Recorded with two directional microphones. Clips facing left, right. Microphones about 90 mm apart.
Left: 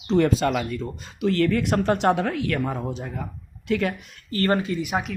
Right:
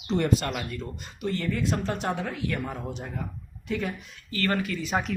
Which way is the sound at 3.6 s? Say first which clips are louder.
Left 6 dB; 80° left.